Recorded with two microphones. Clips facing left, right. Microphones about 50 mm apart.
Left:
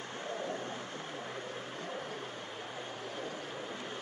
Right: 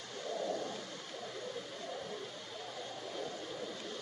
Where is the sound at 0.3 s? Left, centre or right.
Left.